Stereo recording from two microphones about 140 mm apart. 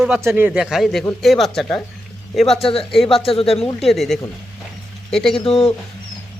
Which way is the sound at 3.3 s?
45° left (ahead or behind).